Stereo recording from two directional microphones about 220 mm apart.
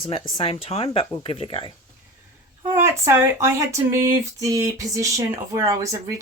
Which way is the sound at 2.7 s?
15° right (ahead or behind).